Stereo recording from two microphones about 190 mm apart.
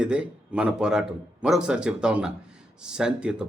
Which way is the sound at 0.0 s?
5° right (ahead or behind).